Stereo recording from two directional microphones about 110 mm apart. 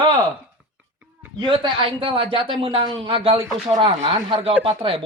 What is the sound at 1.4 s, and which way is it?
Speech, 45° right (ahead or behind).